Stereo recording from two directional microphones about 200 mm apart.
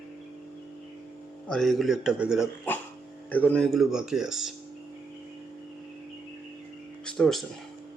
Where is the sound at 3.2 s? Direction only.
10° left (ahead or behind).